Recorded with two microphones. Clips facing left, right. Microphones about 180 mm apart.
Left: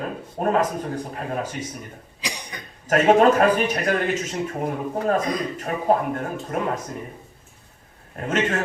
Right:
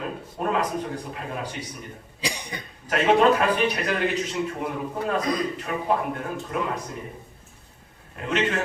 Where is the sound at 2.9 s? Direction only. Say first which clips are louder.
Left 3 dB; 45° left (ahead or behind).